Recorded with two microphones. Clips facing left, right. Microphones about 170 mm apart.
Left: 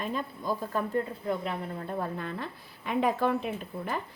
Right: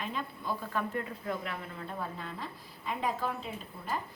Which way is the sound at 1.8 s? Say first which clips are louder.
Left 5 dB; 45° left (ahead or behind).